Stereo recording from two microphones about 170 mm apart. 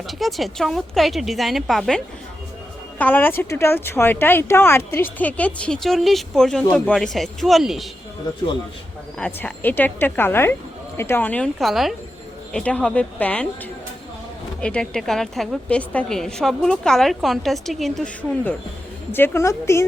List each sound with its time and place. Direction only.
0.1 s a woman's voice: centre (ahead or behind)
3.0 s a woman's voice: 10° left (ahead or behind)
9.1 s speech: 10° left (ahead or behind)
14.6 s a woman's voice: 5° left (ahead or behind)